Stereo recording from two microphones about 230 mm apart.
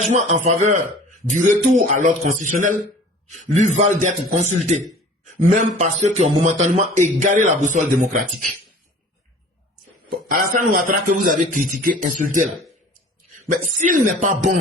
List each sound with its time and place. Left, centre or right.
0.0 s speech: right
10.1 s speech: right
13.7 s speech: right